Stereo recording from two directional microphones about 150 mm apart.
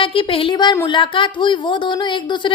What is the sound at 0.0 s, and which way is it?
Speech, 35° left (ahead or behind).